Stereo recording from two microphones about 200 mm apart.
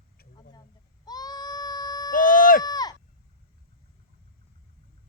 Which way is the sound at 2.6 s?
20° left (ahead or behind).